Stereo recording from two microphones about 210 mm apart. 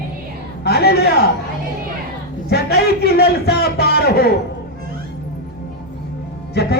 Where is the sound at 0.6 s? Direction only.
50° left (ahead or behind).